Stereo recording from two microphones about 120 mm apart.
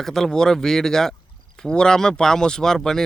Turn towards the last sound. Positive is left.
turn(degrees=5)  # may be behind; listen again after turning